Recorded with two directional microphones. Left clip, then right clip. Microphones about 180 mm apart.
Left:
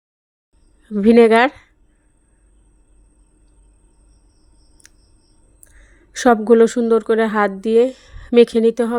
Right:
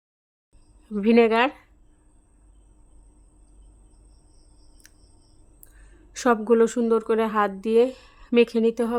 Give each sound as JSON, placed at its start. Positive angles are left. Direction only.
{"t": 0.9, "sound": "speech", "side_deg": 15}
{"t": 1.1, "sound": "speech", "side_deg": 25}
{"t": 4.8, "sound": "a sound", "side_deg": 15}
{"t": 6.5, "sound": "a woman's voice", "side_deg": 15}